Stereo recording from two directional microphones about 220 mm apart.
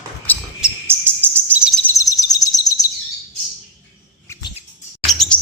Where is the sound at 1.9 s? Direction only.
15° left (ahead or behind).